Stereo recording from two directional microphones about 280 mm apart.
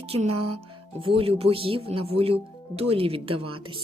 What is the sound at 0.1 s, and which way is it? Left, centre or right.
Speech, right.